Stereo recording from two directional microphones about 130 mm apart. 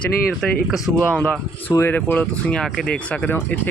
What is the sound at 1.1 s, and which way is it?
Speech, 10° left (ahead or behind).